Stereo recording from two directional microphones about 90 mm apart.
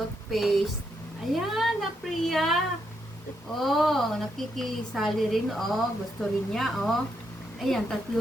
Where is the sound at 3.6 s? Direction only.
Centre (ahead or behind).